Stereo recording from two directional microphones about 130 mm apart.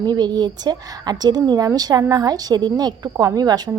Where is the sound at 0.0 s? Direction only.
30° right (ahead or behind).